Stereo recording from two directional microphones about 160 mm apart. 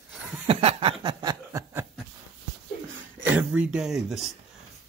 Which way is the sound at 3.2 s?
10° right (ahead or behind).